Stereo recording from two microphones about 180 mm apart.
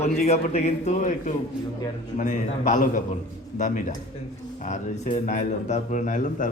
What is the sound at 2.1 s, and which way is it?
A man's voice, 45° left (ahead or behind).